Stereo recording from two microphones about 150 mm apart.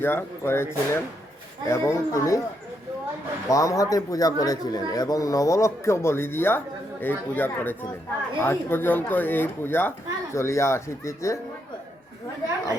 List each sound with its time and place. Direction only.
0.0 s a man's voice: 15° left (ahead or behind)
3.5 s a man's voice: 20° left (ahead or behind)